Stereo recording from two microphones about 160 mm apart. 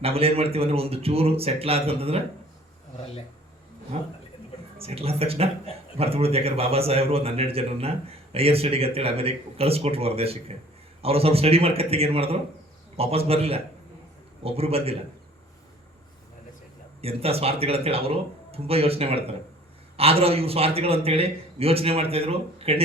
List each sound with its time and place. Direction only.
0.0 s a man's voice: 40° right (ahead or behind)
3.9 s a man's voice: 40° right (ahead or behind)
17.0 s a man's voice: 40° right (ahead or behind)